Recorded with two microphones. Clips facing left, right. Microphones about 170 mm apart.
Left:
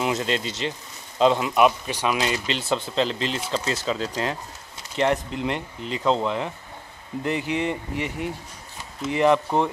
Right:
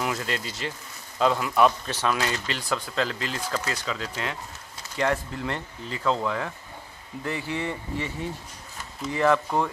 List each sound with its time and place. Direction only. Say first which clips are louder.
0.0 s speech: left 5 dB; 20° left (ahead or behind)
4.9 s speech: left 3 dB; 20° left (ahead or behind)